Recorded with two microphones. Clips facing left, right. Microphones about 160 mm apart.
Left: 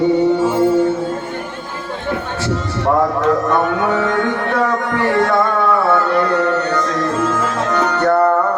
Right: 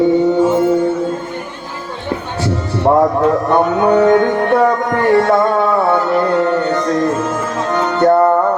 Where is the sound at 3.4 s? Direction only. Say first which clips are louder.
Right 3 dB; 25° right (ahead or behind).